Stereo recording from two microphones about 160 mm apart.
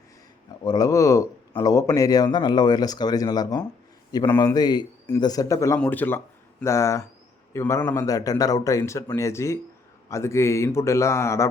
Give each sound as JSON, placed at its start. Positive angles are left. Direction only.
{"t": 0.6, "sound": "a man's voice", "side_deg": 25}